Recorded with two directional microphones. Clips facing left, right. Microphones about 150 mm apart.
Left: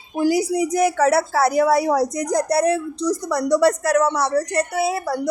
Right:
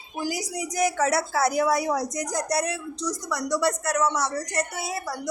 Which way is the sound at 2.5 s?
55° left (ahead or behind).